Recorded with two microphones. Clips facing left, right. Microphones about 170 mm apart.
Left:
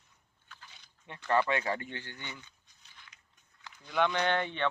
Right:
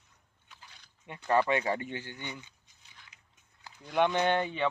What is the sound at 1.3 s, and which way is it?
Speech, 15° right (ahead or behind).